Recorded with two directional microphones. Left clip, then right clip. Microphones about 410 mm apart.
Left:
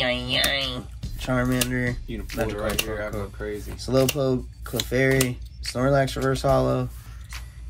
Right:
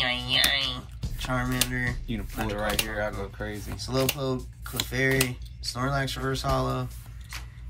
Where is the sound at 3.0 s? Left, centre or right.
Right.